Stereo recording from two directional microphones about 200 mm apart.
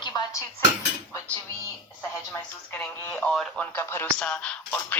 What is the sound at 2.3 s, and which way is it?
Telephone, 10° left (ahead or behind).